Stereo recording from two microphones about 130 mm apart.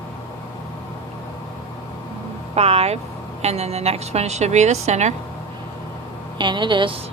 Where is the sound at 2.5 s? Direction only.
55° right (ahead or behind).